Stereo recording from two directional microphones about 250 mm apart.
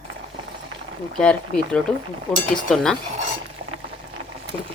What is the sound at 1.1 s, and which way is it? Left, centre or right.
A woman's voice, centre.